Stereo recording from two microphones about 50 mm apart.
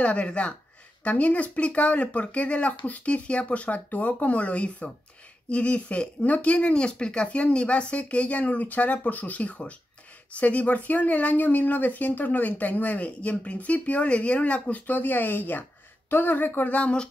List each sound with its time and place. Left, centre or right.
0.0 s speech: left
16.7 s speech: left